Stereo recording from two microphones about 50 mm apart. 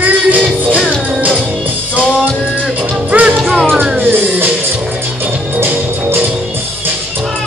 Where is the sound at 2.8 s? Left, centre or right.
Right.